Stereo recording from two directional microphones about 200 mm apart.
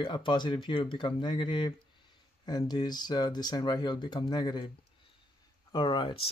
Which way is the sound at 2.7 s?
20° left (ahead or behind).